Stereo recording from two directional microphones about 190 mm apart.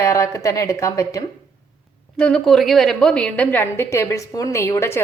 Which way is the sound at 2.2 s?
5° left (ahead or behind).